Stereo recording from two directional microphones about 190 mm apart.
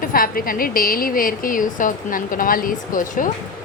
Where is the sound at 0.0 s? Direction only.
50° left (ahead or behind).